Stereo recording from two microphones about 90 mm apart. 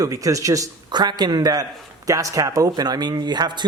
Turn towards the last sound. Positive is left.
turn(degrees=-55)  # may be behind; listen again after turning